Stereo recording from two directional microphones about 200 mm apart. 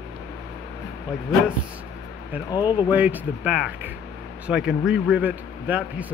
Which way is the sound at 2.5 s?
20° left (ahead or behind).